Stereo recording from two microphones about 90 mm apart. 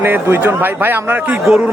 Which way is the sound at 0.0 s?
25° right (ahead or behind).